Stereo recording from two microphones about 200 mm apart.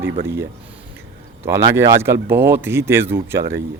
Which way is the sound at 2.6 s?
10° right (ahead or behind).